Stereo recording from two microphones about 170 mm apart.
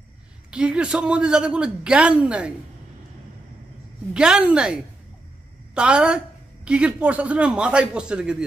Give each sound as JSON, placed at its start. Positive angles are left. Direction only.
{"t": 0.5, "sound": "a woman's voice", "side_deg": -5}
{"t": 4.1, "sound": "a woman's voice", "side_deg": -5}
{"t": 5.8, "sound": "a woman's voice", "side_deg": -5}